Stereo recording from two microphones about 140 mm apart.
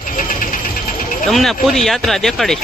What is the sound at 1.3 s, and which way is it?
Speech, centre (ahead or behind).